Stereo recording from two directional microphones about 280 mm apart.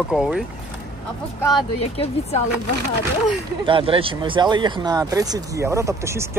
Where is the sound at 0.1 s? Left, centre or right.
Centre.